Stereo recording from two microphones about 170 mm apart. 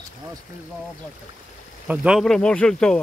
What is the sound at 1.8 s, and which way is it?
Speech, 5° right (ahead or behind).